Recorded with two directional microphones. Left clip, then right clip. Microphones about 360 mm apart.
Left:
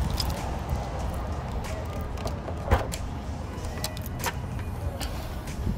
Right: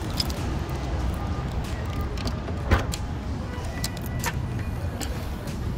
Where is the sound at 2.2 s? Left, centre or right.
Left.